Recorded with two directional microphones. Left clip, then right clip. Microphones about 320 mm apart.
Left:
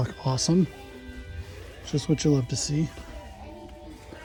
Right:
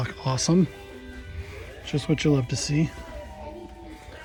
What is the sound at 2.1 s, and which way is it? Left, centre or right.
Speech, centre.